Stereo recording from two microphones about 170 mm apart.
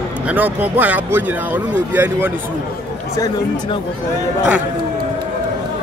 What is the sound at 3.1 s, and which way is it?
Speech, 20° left (ahead or behind).